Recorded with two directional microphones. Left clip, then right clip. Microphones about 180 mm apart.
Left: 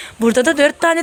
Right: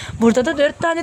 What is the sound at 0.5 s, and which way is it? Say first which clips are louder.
Speech: left 4 dB; 20° left (ahead or behind).